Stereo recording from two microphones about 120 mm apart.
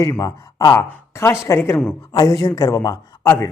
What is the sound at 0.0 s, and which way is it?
Speech, 30° left (ahead or behind).